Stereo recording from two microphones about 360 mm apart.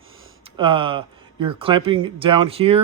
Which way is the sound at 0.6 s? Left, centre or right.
Centre.